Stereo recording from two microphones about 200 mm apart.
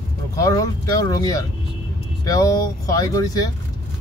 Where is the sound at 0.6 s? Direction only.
20° left (ahead or behind).